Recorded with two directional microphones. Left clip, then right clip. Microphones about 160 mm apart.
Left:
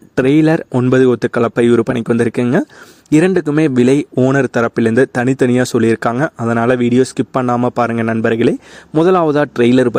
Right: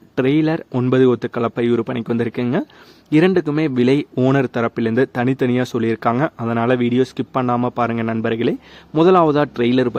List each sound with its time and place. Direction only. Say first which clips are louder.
0.2 s speech: left 6 dB; 40° left (ahead or behind)